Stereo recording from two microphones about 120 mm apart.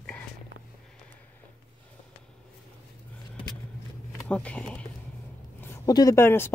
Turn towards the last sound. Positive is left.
turn(degrees=20)  # may be behind; listen again after turning